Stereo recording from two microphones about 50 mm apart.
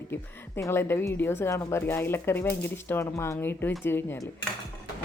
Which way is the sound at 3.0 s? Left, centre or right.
Left.